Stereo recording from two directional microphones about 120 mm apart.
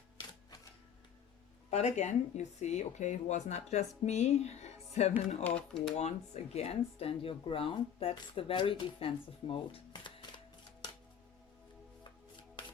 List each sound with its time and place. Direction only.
1.7 s speech: 70° left (ahead or behind)
5.4 s speech: 10° left (ahead or behind)
6.0 s speech: 65° left (ahead or behind); by 10.4 s 40° left (ahead or behind)